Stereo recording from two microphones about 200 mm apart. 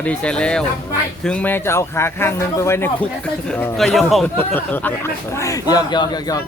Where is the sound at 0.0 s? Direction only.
5° left (ahead or behind).